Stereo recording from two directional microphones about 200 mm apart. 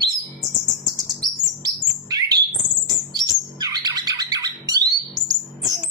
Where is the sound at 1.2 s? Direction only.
20° right (ahead or behind).